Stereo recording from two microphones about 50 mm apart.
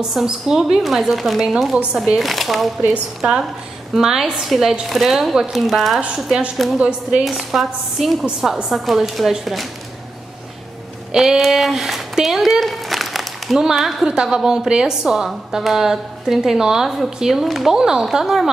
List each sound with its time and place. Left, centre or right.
0.0 s speech: centre
3.2 s a woman's voice: centre
6.8 s a woman's voice: centre
7.2 s speech: centre
11.1 s a woman's voice: centre